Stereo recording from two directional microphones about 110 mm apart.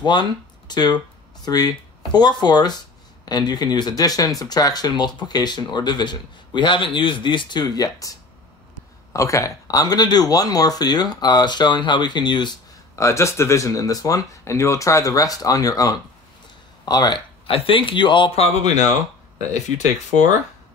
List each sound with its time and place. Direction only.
0.0 s speech: 40° left (ahead or behind)
12.9 s speech: 25° left (ahead or behind)
17.5 s speech: 55° left (ahead or behind)
18.3 s speech: 65° left (ahead or behind)